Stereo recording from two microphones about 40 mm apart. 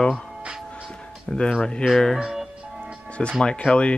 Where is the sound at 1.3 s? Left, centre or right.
Left.